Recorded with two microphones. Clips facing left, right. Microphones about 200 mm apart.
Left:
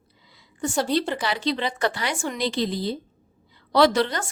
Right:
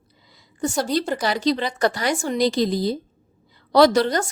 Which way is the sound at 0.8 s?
40° right (ahead or behind).